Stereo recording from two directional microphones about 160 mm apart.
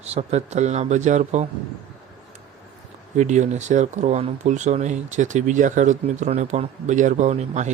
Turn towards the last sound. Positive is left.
turn(degrees=-45)  # may be behind; listen again after turning